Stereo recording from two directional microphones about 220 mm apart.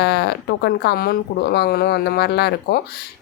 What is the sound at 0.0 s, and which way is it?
Speech, 50° left (ahead or behind).